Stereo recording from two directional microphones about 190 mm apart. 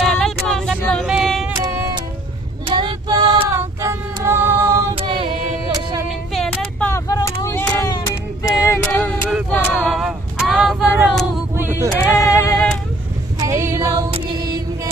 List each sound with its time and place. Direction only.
0.0 s a sound: 5° left (ahead or behind)
1.5 s music: 15° right (ahead or behind)
2.6 s female singing: 25° right (ahead or behind)
4.9 s music: 30° right (ahead or behind)
6.0 s a sound: centre (ahead or behind)
6.9 s vehicle: 15° left (ahead or behind)
7.9 s female singing: 15° left (ahead or behind)
9.8 s female singing: 5° right (ahead or behind)
12.2 s music: 15° left (ahead or behind)
13.4 s female singing: 15° right (ahead or behind)